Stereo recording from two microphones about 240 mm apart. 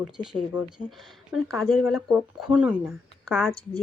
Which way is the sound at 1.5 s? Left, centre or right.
Centre.